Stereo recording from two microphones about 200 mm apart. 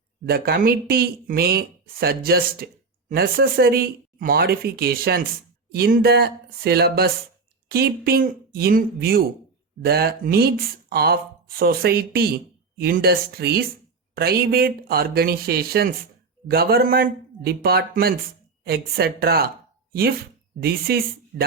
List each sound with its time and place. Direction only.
0.3 s speech: 50° right (ahead or behind)
20.6 s speech: 50° right (ahead or behind)